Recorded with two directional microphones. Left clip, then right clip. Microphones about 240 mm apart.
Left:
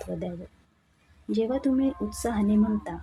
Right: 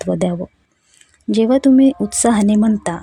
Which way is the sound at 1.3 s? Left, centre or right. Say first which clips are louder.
Right 13 dB; right.